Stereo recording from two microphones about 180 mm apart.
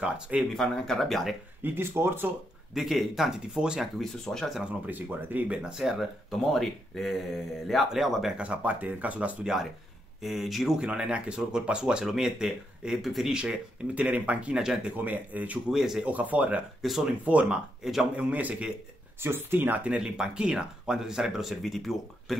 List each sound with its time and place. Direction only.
0.0 s speech: 5° right (ahead or behind)
1.6 s speech: 15° right (ahead or behind); by 4.6 s 5° left (ahead or behind)
4.8 s speech: 10° right (ahead or behind)